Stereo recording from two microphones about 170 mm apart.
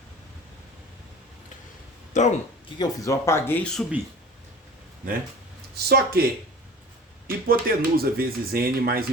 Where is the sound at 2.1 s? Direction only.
45° left (ahead or behind).